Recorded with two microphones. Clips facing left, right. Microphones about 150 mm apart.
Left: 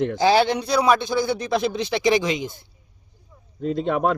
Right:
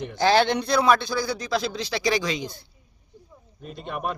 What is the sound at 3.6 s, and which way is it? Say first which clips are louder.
Speech: left 10 dB; 90° left.